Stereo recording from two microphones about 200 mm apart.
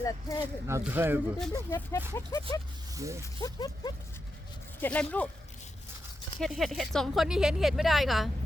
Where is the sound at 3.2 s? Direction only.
15° left (ahead or behind).